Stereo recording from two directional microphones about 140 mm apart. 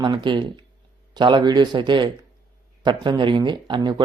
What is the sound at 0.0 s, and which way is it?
Speech, 35° right (ahead or behind).